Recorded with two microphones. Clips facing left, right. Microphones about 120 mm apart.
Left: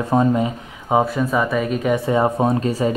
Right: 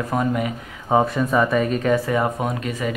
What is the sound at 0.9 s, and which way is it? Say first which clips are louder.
A man's voice: left 1 dB; 5° left (ahead or behind).